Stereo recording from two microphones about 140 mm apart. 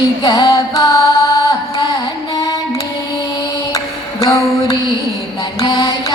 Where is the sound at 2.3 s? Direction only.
25° left (ahead or behind).